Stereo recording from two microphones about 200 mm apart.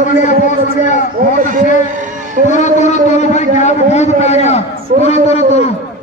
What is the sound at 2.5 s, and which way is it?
A man's voice, 35° left (ahead or behind).